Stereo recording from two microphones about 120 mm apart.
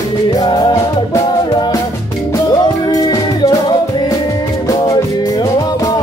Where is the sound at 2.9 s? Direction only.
30° left (ahead or behind).